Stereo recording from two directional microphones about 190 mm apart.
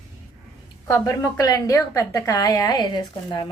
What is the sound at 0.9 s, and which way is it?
A woman's voice, 20° left (ahead or behind).